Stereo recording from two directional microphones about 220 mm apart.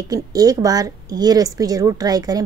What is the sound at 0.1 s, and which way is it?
A woman's voice, 15° right (ahead or behind).